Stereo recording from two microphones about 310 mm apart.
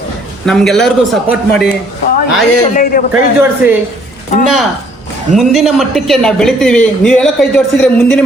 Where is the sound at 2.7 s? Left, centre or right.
Left.